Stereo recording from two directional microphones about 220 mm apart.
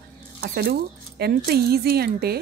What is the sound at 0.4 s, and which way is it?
Speech, 45° right (ahead or behind).